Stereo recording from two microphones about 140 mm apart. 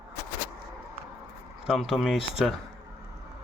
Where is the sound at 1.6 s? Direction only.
Centre (ahead or behind).